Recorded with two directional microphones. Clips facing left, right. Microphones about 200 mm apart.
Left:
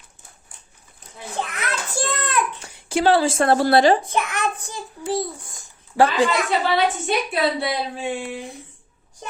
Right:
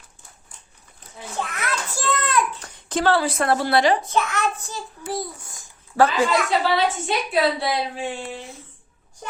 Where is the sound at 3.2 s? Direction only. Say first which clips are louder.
Left 4 dB; 30° left (ahead or behind).